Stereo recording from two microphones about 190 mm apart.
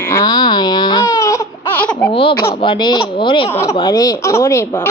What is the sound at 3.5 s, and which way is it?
Speech, 15° left (ahead or behind).